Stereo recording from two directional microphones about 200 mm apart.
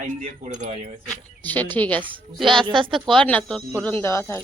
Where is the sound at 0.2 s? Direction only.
35° right (ahead or behind).